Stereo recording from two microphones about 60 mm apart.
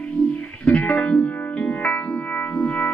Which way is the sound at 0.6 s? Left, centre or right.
Left.